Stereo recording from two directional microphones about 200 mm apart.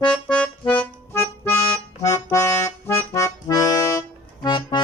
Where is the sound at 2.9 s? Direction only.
15° left (ahead or behind).